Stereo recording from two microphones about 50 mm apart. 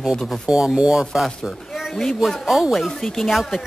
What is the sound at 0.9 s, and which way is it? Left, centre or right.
Speech, centre.